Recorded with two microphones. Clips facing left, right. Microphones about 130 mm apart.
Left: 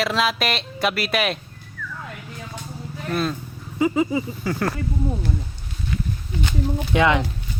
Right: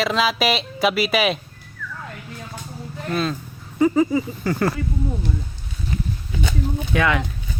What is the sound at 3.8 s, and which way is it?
Speech, 15° left (ahead or behind).